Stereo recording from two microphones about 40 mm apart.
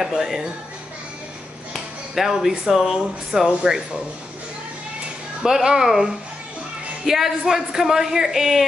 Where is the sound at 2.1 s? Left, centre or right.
Centre.